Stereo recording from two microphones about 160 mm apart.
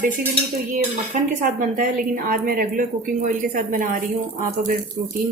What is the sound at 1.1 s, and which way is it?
A woman's voice, 55° right (ahead or behind).